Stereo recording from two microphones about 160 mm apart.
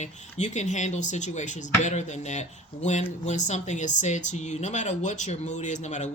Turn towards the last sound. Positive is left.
turn(degrees=50)  # may be behind; listen again after turning